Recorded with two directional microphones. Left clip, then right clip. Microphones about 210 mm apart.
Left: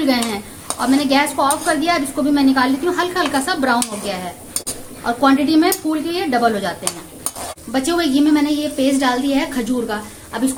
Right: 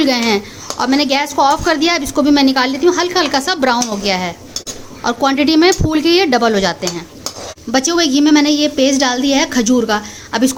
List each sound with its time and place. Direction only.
0.0 s a woman's voice: 35° right (ahead or behind)